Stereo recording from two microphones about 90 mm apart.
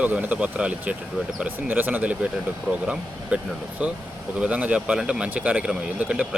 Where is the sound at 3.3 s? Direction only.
15° right (ahead or behind).